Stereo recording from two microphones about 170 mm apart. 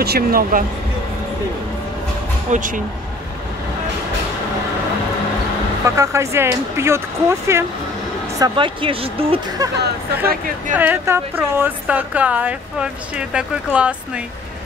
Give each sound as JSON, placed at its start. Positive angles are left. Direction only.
{"t": 0.0, "sound": "speech", "side_deg": -65}
{"t": 2.5, "sound": "speech", "side_deg": -50}
{"t": 5.9, "sound": "a woman's voice", "side_deg": -15}
{"t": 8.4, "sound": "speech", "side_deg": -30}
{"t": 9.6, "sound": "speech", "side_deg": -20}
{"t": 10.7, "sound": "a woman's voice", "side_deg": -10}